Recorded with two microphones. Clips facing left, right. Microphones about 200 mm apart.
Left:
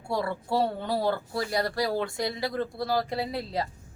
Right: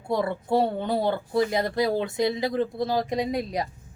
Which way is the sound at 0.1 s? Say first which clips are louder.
Right 4 dB; 20° right (ahead or behind).